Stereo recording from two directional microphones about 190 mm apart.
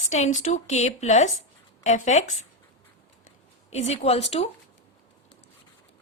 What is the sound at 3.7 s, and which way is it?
Speech, 35° left (ahead or behind).